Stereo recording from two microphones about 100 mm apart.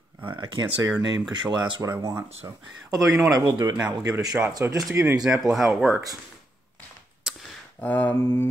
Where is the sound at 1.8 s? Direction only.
30° right (ahead or behind).